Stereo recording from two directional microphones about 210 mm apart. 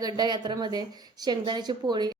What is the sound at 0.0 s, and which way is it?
Speech, 20° right (ahead or behind).